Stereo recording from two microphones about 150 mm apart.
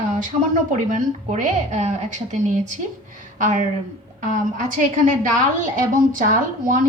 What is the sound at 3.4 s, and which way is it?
Speech, 60° right (ahead or behind).